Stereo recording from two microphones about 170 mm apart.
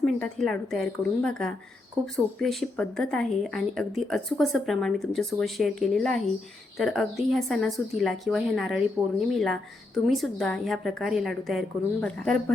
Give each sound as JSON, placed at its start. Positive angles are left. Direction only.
{"t": 0.0, "sound": "speech", "side_deg": 5}